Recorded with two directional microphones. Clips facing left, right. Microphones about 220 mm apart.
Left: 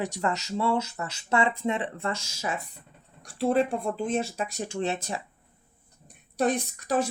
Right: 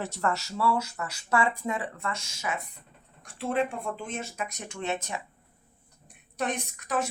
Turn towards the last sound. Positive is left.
turn(degrees=35)  # may be behind; listen again after turning